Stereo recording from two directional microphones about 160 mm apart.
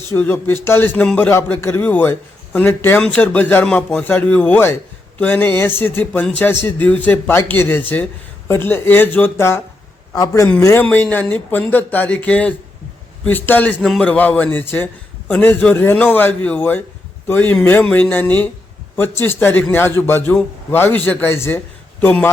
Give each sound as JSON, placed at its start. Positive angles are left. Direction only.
{"t": 0.1, "sound": "a man's voice", "side_deg": 15}